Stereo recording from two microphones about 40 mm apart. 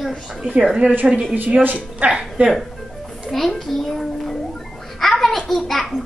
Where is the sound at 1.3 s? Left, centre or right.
Right.